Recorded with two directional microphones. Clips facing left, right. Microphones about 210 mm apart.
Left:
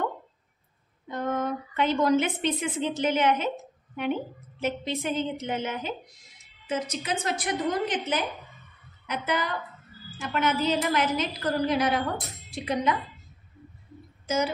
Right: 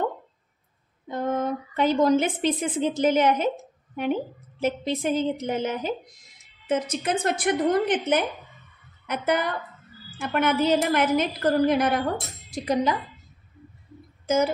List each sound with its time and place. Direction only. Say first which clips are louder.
1.8 s a woman's voice: right 3 dB; 40° right (ahead or behind)
6.7 s a woman's voice: right 5 dB; 55° right (ahead or behind)
12.5 s a woman's voice: right 3 dB; 35° right (ahead or behind)
14.2 s speech: right 5 dB; 50° right (ahead or behind)